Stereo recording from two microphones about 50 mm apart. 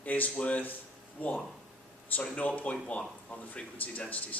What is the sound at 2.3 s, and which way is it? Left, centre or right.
Speech, left.